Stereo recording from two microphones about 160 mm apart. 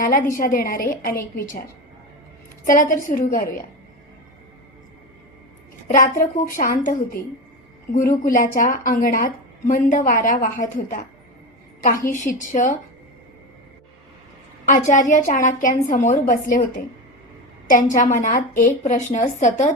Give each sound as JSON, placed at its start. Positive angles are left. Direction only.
{"t": 0.0, "sound": "a woman's voice", "side_deg": 60}
{"t": 2.6, "sound": "a woman's voice", "side_deg": 55}
{"t": 5.9, "sound": "a woman's voice", "side_deg": 60}
{"t": 12.0, "sound": "a woman's voice", "side_deg": 50}
{"t": 14.7, "sound": "a woman's voice", "side_deg": 50}